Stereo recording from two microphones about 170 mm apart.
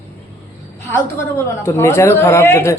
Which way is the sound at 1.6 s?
15° left (ahead or behind).